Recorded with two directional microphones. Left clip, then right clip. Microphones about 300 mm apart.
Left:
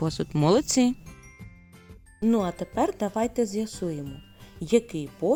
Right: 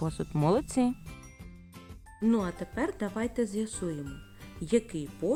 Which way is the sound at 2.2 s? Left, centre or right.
Centre.